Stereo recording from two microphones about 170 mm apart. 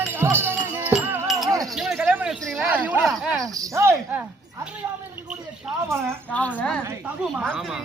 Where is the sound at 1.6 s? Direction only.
Centre (ahead or behind).